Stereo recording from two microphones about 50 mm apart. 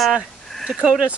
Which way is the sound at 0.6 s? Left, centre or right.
Centre.